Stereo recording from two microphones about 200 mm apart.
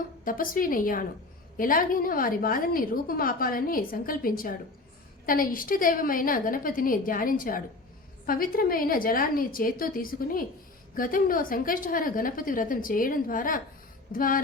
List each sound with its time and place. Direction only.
0.3 s a woman's voice: 45° left (ahead or behind)